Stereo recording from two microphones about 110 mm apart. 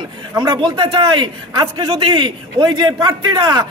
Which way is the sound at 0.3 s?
30° right (ahead or behind).